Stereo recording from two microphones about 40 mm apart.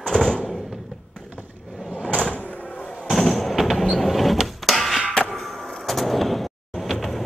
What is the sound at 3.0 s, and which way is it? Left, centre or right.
Fireworks, centre.